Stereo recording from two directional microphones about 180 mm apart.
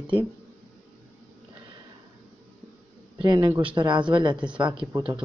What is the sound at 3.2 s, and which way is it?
Speech, 25° right (ahead or behind).